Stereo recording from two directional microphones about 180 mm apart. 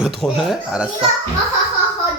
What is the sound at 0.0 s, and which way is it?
Speech, 5° right (ahead or behind).